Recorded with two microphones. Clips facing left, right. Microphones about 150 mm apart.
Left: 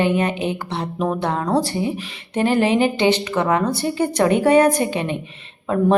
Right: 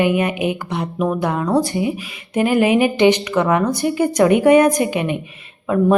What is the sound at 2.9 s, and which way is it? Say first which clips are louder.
Speech: right 4 dB; 15° right (ahead or behind).